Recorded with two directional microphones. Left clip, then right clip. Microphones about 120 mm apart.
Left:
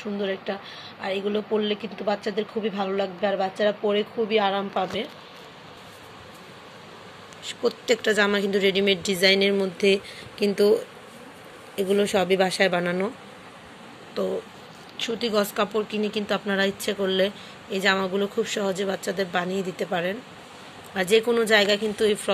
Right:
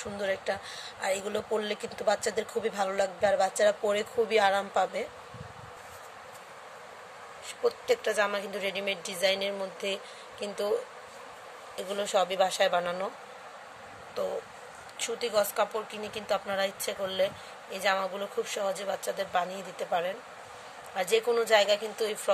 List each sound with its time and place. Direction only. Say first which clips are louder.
0.0 s speech: left 3 dB; 30° right (ahead or behind)
7.6 s speech: left 5 dB; 5° left (ahead or behind)
15.0 s speech: left 4 dB; 10° left (ahead or behind)